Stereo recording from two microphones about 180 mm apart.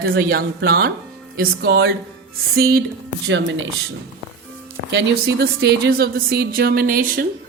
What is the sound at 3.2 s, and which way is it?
Speech, 90° right.